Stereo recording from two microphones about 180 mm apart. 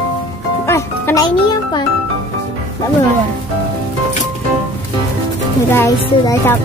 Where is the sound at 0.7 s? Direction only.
15° left (ahead or behind).